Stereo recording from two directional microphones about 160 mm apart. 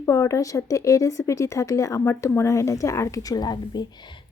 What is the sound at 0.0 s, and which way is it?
A woman's voice, 15° left (ahead or behind).